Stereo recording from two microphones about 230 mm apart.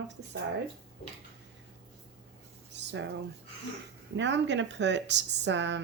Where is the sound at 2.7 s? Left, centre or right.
Right.